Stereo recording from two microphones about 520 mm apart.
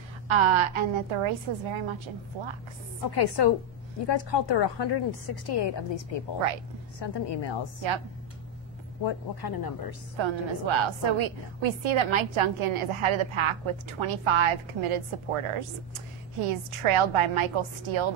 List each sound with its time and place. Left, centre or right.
0.3 s a woman's voice: right
3.0 s a woman's voice: left
9.0 s a woman's voice: left
10.1 s a woman's voice: right